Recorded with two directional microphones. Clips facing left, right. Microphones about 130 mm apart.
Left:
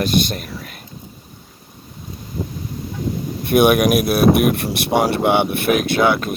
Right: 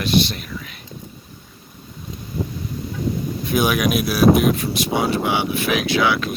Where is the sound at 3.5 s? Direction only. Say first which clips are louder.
Left 6 dB; 60° left (ahead or behind).